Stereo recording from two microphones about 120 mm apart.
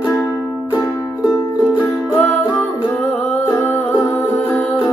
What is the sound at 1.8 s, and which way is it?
Music, 15° left (ahead or behind).